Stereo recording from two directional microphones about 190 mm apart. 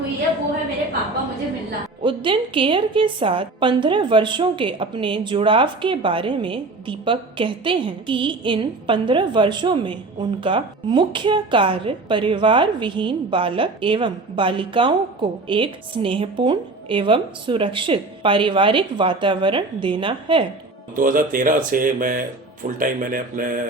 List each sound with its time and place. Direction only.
2.0 s a woman's voice: 25° right (ahead or behind)
20.9 s speech: 45° right (ahead or behind)